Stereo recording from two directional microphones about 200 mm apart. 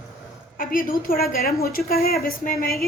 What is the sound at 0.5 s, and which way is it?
A woman's voice, 45° left (ahead or behind).